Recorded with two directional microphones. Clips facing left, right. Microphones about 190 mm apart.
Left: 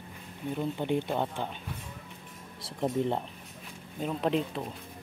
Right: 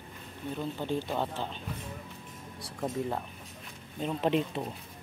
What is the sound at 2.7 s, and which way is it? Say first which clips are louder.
Speech: left 4 dB; 20° left (ahead or behind).